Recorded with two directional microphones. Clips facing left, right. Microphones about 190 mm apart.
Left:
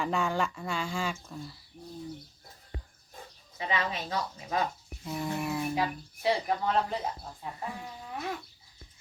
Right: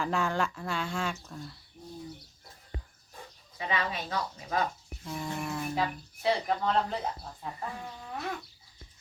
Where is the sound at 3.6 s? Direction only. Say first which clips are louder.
Left 1 dB; 25° left (ahead or behind).